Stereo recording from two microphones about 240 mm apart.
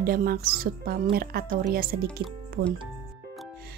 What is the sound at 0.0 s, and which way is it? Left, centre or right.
Speech, right.